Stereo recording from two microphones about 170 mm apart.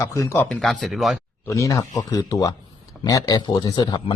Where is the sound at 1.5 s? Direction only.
20° left (ahead or behind).